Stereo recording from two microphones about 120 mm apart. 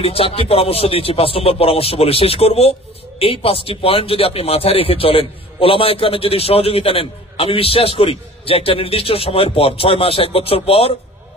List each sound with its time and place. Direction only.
0.0 s speech: 55° left (ahead or behind)